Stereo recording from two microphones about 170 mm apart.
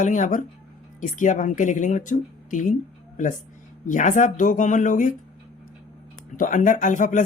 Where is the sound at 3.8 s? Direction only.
45° left (ahead or behind).